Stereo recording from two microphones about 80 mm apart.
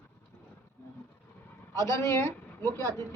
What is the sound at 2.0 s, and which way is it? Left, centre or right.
Speech, left.